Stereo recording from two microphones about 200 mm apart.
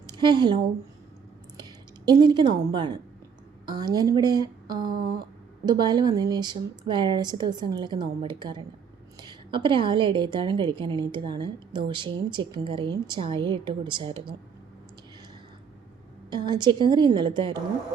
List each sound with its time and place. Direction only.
0.1 s a woman's voice: 20° right (ahead or behind)
16.3 s a woman's voice: 20° right (ahead or behind)